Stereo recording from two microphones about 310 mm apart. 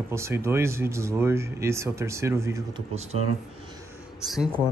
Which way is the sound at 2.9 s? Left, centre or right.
Right.